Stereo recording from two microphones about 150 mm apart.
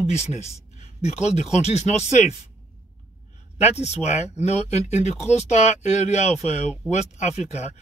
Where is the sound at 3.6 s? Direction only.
50° left (ahead or behind).